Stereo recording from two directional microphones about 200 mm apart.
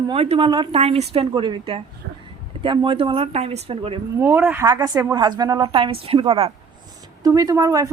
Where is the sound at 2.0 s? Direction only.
55° right (ahead or behind).